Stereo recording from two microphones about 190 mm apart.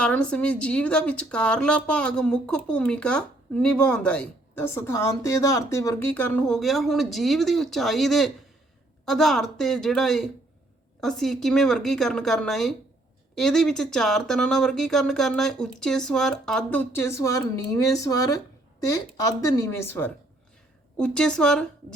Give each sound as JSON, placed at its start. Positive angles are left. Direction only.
{"t": 0.0, "sound": "a woman's voice", "side_deg": 5}